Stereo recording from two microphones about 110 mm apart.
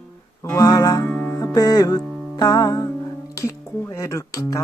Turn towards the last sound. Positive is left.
turn(degrees=30)  # may be behind; listen again after turning